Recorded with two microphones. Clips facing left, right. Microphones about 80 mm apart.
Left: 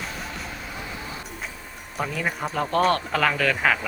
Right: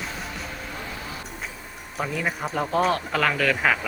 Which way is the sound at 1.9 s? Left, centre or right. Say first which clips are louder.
Even; centre.